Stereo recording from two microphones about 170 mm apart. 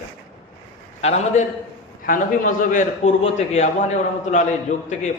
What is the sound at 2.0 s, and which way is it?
A man's voice, 55° left (ahead or behind).